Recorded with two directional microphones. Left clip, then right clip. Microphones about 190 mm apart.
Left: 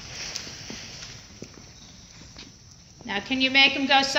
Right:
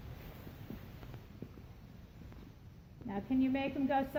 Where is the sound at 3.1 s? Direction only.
40° right (ahead or behind).